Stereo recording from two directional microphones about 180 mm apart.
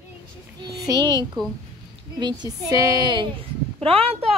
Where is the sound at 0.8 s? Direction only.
25° right (ahead or behind).